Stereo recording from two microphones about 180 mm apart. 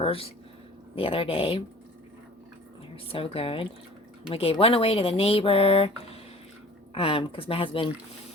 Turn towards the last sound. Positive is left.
turn(degrees=30)  # may be behind; listen again after turning